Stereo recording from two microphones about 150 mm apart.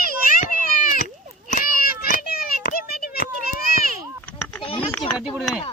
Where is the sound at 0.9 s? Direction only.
60° left (ahead or behind); by 3.2 s 90° left.